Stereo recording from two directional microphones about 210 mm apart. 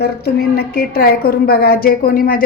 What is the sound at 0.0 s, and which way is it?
A woman's voice, 50° left (ahead or behind).